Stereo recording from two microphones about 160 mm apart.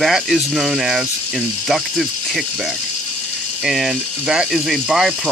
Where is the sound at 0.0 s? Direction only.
5° right (ahead or behind).